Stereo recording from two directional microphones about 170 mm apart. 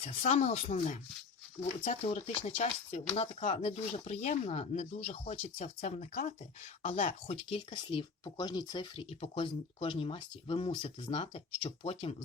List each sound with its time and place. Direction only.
0.0 s speech: 40° left (ahead or behind)